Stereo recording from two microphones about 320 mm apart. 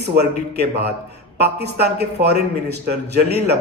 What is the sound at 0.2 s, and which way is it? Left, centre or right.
Speech, right.